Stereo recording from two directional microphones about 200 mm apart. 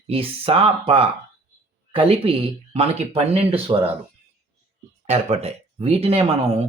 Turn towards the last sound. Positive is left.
turn(degrees=-30)  # may be behind; listen again after turning